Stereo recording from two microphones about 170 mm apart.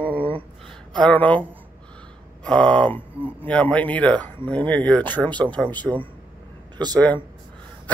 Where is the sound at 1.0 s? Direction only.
10° left (ahead or behind).